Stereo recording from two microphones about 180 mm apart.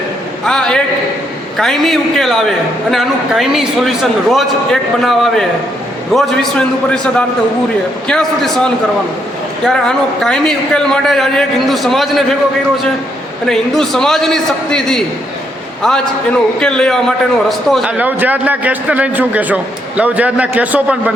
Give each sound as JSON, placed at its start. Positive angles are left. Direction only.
{"t": 0.4, "sound": "a sound", "side_deg": 5}
{"t": 1.5, "sound": "a man's voice", "side_deg": 0}
{"t": 13.5, "sound": "a man's voice", "side_deg": 0}
{"t": 16.6, "sound": "a man's voice", "side_deg": 5}